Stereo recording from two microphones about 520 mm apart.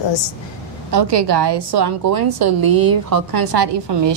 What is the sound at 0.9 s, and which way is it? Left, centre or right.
A woman's voice, right.